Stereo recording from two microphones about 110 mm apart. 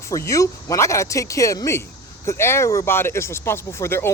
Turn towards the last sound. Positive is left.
turn(degrees=20)  # may be behind; listen again after turning